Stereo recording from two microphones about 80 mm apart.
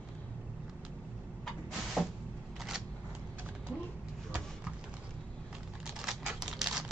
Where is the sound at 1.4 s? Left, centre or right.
Centre.